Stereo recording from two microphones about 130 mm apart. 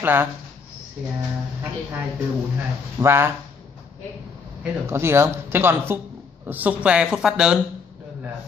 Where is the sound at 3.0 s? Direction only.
20° right (ahead or behind).